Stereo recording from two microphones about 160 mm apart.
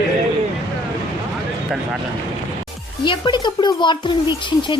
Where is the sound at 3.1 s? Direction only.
30° left (ahead or behind).